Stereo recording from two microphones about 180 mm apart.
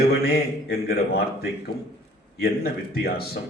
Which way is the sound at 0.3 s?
60° left (ahead or behind).